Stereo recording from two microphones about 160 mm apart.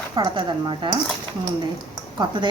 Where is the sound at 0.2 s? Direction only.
30° right (ahead or behind).